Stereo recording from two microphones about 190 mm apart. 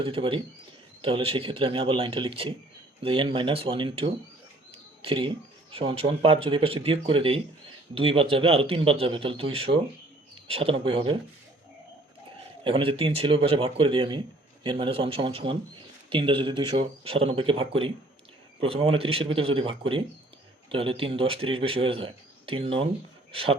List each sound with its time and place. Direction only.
0.0 s speech: 30° right (ahead or behind)
12.6 s speech: 30° right (ahead or behind)